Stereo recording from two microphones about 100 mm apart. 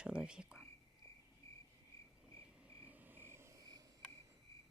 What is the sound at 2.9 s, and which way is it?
Cricket, 20° right (ahead or behind).